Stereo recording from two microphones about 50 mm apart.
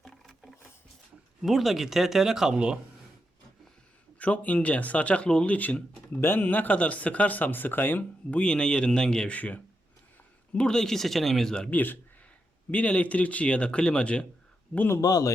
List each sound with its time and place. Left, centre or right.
1.4 s speech: centre
4.2 s speech: left
5.5 s speech: left
6.1 s speech: left
6.4 s speech: left
8.4 s speech: centre
9.3 s speech: left
10.5 s speech: centre
11.7 s speech: left
12.7 s speech: left